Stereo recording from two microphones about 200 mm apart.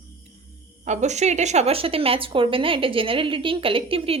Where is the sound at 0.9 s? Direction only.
35° right (ahead or behind).